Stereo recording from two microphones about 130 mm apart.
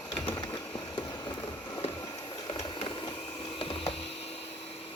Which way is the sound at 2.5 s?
40° left (ahead or behind).